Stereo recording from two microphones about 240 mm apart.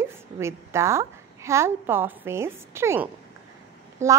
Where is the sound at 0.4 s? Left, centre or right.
Centre.